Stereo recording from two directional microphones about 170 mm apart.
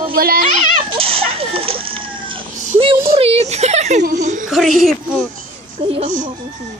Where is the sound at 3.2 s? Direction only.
35° right (ahead or behind).